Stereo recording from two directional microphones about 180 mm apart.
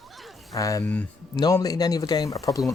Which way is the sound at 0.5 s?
20° left (ahead or behind).